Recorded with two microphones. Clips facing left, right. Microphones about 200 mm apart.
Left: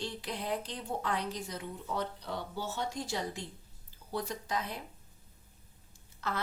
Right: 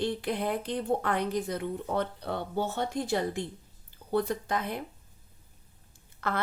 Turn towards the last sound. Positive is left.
turn(degrees=-55)  # may be behind; listen again after turning